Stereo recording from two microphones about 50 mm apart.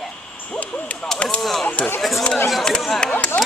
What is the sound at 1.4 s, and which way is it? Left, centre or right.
Speech, centre.